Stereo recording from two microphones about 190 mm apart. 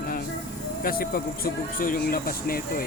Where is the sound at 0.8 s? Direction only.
50° left (ahead or behind).